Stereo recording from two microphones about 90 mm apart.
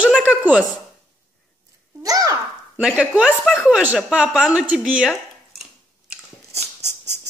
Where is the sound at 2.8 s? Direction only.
10° right (ahead or behind).